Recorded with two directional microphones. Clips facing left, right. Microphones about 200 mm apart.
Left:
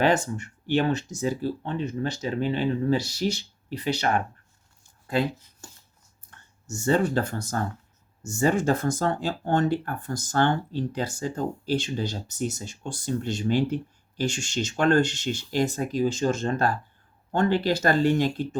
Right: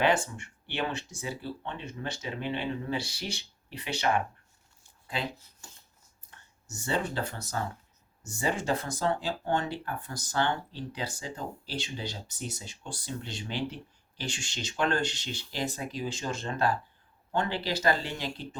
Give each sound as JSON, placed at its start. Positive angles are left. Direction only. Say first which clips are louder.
{"t": 0.0, "sound": "speech", "louder": "left 4 dB", "side_deg": 40}
{"t": 6.7, "sound": "speech", "louder": "left 9 dB", "side_deg": 45}